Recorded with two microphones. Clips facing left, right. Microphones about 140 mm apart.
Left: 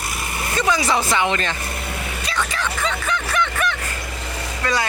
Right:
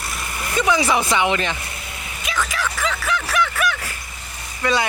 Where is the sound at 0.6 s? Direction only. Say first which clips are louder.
Right 1 dB; 15° right (ahead or behind).